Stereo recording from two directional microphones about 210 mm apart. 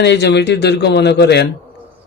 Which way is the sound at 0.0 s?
55° left (ahead or behind).